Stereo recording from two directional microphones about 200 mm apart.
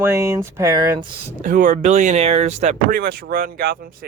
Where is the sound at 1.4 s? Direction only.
40° right (ahead or behind).